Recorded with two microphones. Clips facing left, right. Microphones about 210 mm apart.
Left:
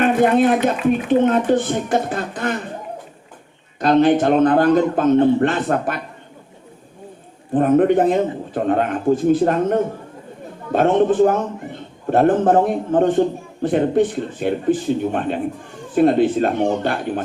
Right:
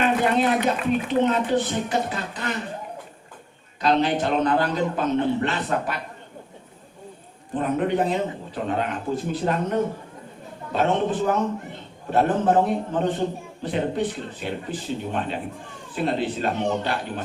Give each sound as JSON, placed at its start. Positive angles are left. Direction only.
{"t": 0.0, "sound": "a man's voice", "side_deg": 50}
{"t": 3.8, "sound": "a man's voice", "side_deg": 50}
{"t": 7.5, "sound": "a man's voice", "side_deg": 50}